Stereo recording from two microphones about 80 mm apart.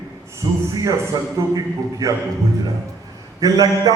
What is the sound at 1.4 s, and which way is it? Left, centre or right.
Speech, right.